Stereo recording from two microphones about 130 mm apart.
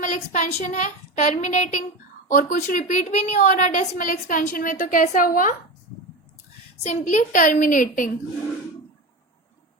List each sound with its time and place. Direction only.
0.0 s a woman's voice: 70° left (ahead or behind)
2.2 s a woman's voice: 85° left
6.8 s a woman's voice: 70° left (ahead or behind); by 8.1 s 90° left